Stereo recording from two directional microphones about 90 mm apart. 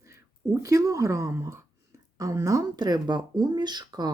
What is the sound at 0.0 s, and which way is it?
Speech, 30° right (ahead or behind).